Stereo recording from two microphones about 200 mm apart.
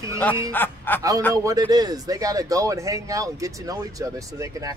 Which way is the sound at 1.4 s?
20° right (ahead or behind).